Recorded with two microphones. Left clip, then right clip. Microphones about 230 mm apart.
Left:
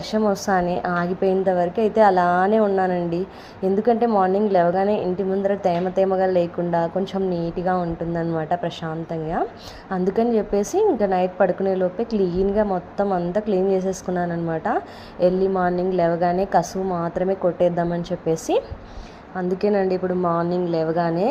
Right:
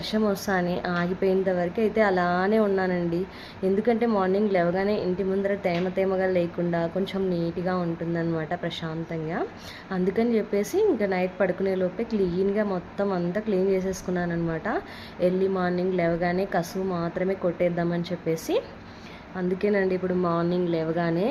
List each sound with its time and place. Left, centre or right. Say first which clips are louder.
0.1 s a woman's voice: left 6 dB; centre
10.2 s a woman's voice: left 5 dB; centre